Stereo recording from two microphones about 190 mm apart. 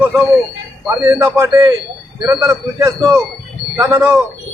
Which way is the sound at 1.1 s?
15° right (ahead or behind).